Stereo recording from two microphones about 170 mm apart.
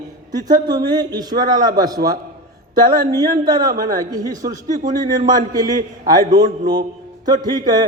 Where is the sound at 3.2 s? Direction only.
20° right (ahead or behind).